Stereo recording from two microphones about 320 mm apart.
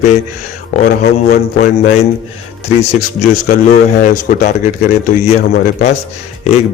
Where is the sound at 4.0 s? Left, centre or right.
Left.